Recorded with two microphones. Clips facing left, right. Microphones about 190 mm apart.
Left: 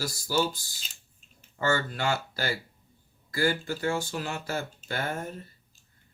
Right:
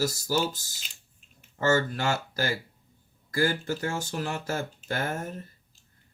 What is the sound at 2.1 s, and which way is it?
Speech, 45° right (ahead or behind).